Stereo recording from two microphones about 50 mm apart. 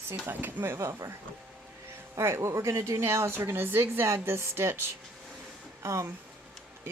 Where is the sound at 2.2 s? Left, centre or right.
Right.